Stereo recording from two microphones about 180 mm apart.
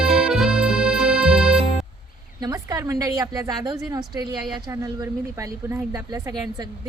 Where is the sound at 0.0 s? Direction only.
5° right (ahead or behind).